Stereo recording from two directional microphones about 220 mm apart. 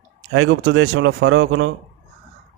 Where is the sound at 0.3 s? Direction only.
70° right (ahead or behind).